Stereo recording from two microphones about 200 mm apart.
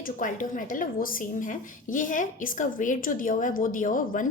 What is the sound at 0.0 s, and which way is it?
Speech, 40° left (ahead or behind).